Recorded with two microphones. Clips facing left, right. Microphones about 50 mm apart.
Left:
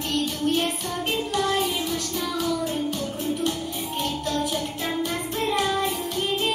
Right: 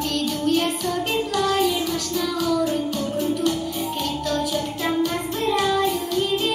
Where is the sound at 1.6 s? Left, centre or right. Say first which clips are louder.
Right 4 dB; left.